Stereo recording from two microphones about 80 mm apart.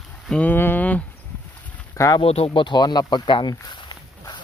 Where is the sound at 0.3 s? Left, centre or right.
Centre.